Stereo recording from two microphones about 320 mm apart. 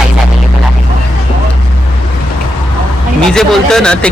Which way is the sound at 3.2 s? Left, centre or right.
Centre.